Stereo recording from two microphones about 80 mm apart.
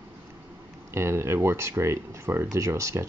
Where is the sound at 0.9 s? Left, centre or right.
Right.